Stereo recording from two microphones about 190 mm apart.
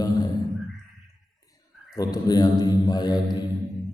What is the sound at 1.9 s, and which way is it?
A man's voice, 20° left (ahead or behind).